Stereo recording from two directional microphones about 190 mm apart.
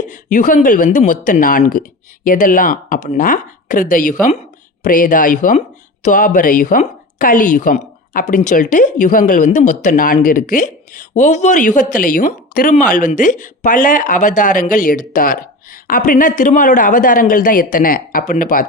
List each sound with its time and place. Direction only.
0.1 s speech: 40° left (ahead or behind)